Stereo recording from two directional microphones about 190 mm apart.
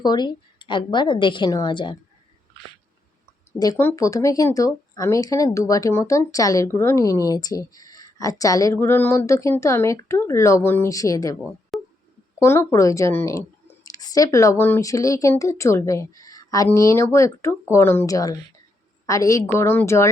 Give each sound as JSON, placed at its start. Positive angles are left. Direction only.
{"t": 0.0, "sound": "a woman's voice", "side_deg": 20}
{"t": 3.6, "sound": "speech", "side_deg": 15}
{"t": 11.7, "sound": "a sound", "side_deg": 0}
{"t": 12.4, "sound": "speech", "side_deg": 15}